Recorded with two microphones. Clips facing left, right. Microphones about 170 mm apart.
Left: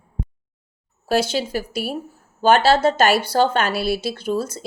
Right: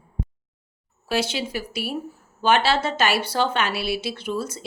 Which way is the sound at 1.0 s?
40° left (ahead or behind).